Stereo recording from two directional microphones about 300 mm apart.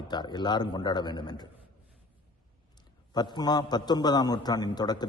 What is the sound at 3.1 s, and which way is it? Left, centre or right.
A man's voice, centre.